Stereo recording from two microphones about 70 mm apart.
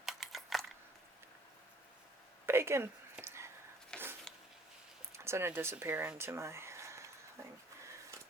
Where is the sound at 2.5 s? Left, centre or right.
Right.